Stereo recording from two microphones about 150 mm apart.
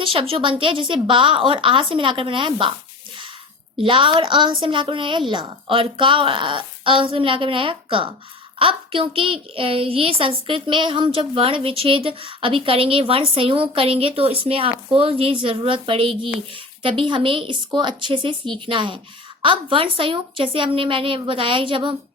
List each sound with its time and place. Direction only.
0.0 s a woman's voice: 35° right (ahead or behind)
3.8 s a woman's voice: 35° right (ahead or behind)